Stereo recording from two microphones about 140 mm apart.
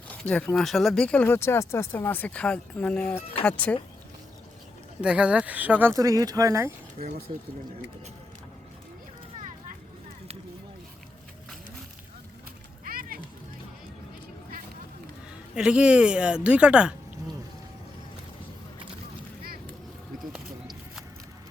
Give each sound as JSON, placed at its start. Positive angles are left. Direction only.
{"t": 0.1, "sound": "a sound", "side_deg": 10}
{"t": 0.5, "sound": "speech", "side_deg": 0}
{"t": 4.9, "sound": "speech", "side_deg": -10}
{"t": 5.9, "sound": "speech", "side_deg": -25}
{"t": 12.8, "sound": "music", "side_deg": -90}
{"t": 15.5, "sound": "speech", "side_deg": -5}